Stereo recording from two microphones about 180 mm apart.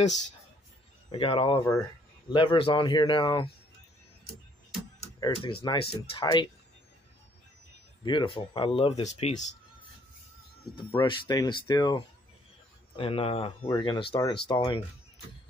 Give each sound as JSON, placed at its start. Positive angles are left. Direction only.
{"t": 1.1, "sound": "speech", "side_deg": 30}
{"t": 5.2, "sound": "speech", "side_deg": 30}
{"t": 8.0, "sound": "speech", "side_deg": 25}
{"t": 11.0, "sound": "speech", "side_deg": 25}
{"t": 12.9, "sound": "speech", "side_deg": 30}